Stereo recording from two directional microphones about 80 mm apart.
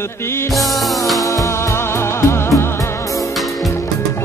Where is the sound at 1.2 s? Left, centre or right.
Left.